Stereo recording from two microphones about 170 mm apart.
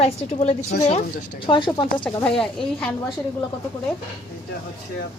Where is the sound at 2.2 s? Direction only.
5° left (ahead or behind).